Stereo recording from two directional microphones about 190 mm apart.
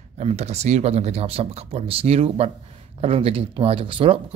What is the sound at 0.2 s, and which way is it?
Speech, 35° right (ahead or behind).